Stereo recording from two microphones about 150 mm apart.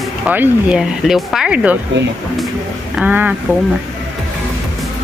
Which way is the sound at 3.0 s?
10° right (ahead or behind).